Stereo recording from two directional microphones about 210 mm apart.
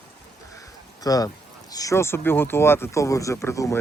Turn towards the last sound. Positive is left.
turn(degrees=15)  # may be behind; listen again after turning